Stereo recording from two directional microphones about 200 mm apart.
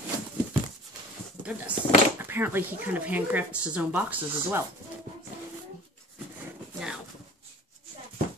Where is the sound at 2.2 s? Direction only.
10° right (ahead or behind).